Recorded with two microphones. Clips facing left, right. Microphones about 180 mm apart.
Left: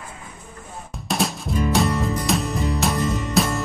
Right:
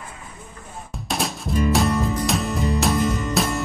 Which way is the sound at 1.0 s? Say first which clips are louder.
Left 2 dB; centre (ahead or behind).